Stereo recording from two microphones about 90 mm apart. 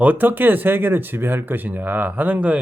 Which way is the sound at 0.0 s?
20° right (ahead or behind).